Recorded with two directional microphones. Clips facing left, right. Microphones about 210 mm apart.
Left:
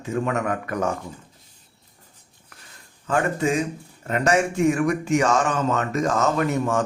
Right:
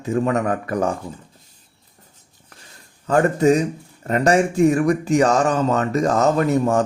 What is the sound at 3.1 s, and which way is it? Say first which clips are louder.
Speech: right 7 dB; 40° right (ahead or behind).